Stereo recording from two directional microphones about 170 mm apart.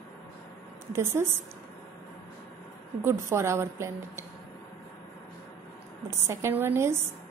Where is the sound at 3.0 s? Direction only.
15° right (ahead or behind).